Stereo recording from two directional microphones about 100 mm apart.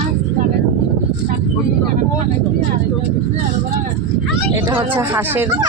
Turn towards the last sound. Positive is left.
turn(degrees=-20)  # may be behind; listen again after turning